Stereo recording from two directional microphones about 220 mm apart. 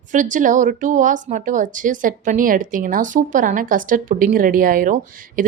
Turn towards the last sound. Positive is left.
turn(degrees=-35)  # may be behind; listen again after turning